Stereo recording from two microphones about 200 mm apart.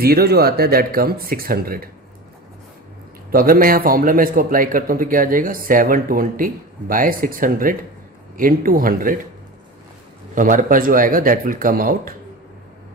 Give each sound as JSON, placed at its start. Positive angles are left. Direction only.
{"t": 0.0, "sound": "a man's voice", "side_deg": -50}
{"t": 3.3, "sound": "a man's voice", "side_deg": -45}
{"t": 10.3, "sound": "a man's voice", "side_deg": -40}